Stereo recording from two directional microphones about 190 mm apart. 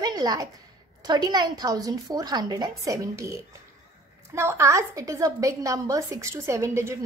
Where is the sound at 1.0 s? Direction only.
20° right (ahead or behind).